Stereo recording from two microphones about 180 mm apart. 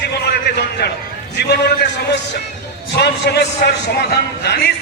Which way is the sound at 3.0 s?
65° left (ahead or behind).